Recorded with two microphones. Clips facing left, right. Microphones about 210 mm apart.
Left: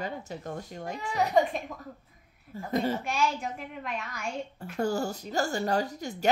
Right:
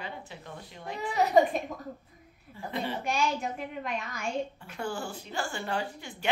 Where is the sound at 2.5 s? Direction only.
40° left (ahead or behind).